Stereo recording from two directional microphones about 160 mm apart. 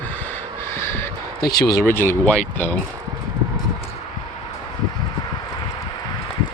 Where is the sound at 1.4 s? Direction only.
75° left (ahead or behind).